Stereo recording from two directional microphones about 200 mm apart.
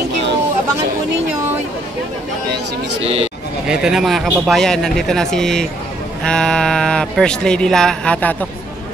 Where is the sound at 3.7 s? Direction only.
5° right (ahead or behind).